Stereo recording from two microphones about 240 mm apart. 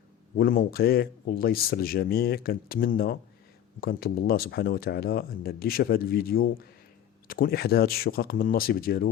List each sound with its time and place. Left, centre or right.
0.3 s speech: left